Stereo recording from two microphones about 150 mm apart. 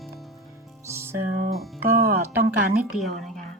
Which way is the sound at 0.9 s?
15° right (ahead or behind).